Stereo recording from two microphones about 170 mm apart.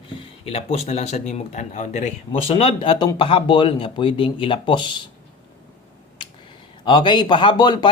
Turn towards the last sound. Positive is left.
turn(degrees=25)  # may be behind; listen again after turning